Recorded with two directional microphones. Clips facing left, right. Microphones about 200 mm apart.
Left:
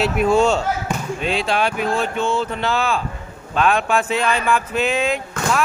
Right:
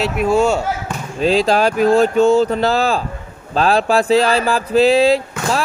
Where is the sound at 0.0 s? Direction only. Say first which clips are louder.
Right 1 dB; centre (ahead or behind).